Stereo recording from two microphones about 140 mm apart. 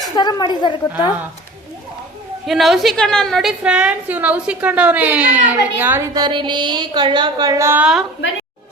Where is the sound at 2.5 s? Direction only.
Centre (ahead or behind).